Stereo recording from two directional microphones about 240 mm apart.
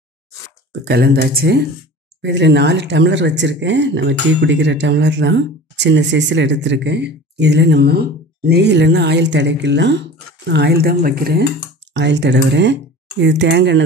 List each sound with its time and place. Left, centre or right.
0.8 s speech: right